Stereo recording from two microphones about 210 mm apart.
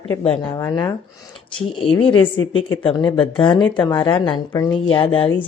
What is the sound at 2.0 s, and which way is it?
Speech, 25° left (ahead or behind).